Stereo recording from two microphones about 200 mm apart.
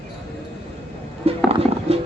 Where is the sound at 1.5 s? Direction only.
30° right (ahead or behind).